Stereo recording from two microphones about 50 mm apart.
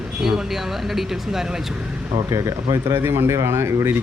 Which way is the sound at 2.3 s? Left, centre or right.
Right.